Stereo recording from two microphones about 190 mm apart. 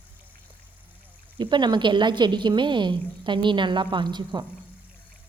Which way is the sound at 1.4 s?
25° right (ahead or behind).